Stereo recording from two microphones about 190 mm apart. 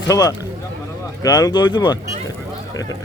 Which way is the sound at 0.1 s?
20° left (ahead or behind).